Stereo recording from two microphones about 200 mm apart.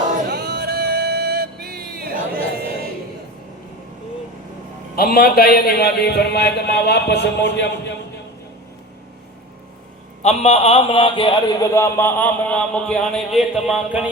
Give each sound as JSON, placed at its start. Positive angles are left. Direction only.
{"t": 0.3, "sound": "music", "side_deg": -55}
{"t": 4.9, "sound": "a man's voice", "side_deg": 50}
{"t": 10.2, "sound": "a man's voice", "side_deg": 30}